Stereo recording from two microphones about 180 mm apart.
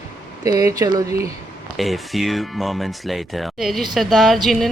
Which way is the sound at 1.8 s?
Centre (ahead or behind).